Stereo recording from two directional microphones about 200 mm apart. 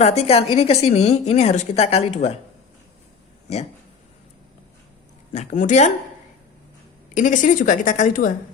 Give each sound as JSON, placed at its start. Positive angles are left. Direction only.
{"t": 0.0, "sound": "a woman's voice", "side_deg": 35}
{"t": 5.3, "sound": "a woman's voice", "side_deg": 35}
{"t": 7.1, "sound": "a woman's voice", "side_deg": 40}